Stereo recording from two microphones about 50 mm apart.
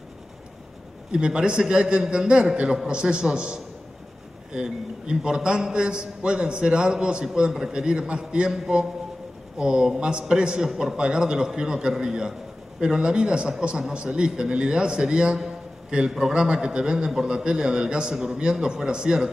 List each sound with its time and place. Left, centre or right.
1.1 s a man's voice: centre